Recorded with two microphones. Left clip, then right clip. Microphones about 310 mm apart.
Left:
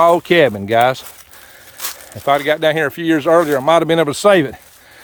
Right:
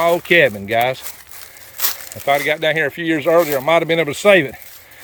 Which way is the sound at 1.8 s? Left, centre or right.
Right.